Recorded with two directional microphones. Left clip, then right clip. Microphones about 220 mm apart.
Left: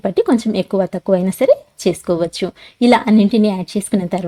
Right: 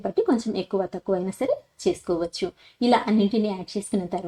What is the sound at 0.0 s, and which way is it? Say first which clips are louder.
A woman's voice: left 8 dB; 40° left (ahead or behind).